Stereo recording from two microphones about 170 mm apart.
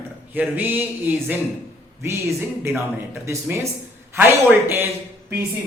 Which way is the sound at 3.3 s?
15° right (ahead or behind).